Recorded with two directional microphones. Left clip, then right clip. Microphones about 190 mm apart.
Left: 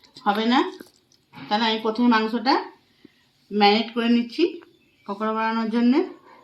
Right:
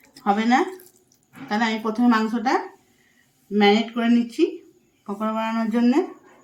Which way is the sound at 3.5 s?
25° right (ahead or behind).